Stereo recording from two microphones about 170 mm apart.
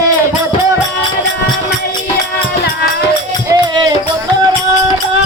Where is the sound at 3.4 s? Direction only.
25° right (ahead or behind).